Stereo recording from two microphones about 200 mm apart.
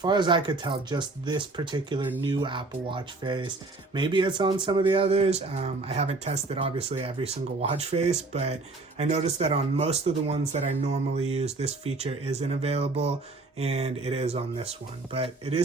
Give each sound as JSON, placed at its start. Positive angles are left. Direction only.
{"t": 0.0, "sound": "speech", "side_deg": -20}